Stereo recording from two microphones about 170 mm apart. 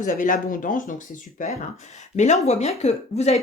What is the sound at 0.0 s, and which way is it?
Speech, 50° left (ahead or behind).